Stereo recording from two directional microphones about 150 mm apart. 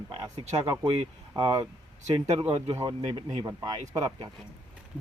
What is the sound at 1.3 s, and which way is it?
Speech, 30° right (ahead or behind).